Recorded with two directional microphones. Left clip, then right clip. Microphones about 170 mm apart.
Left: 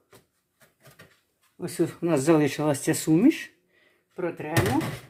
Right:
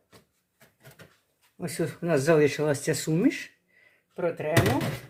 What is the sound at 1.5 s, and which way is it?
Speech, 20° left (ahead or behind).